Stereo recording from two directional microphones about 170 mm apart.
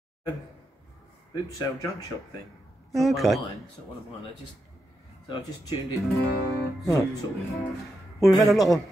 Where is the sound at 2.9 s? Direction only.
Centre (ahead or behind).